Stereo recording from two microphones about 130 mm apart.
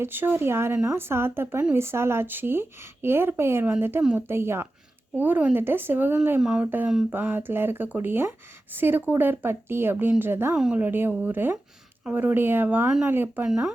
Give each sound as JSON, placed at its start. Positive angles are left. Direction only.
{"t": 0.0, "sound": "a woman's voice", "side_deg": -15}